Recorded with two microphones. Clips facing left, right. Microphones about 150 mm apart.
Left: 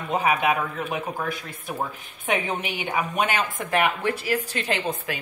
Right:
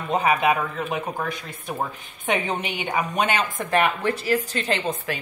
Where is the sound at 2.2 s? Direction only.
5° left (ahead or behind).